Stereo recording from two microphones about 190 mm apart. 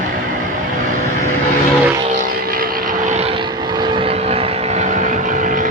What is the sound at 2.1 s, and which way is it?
Vehicle, 50° right (ahead or behind).